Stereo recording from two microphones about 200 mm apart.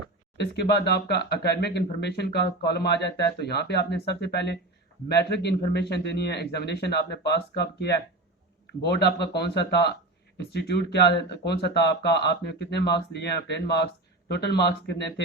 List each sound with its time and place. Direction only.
0.3 s speech: 55° left (ahead or behind)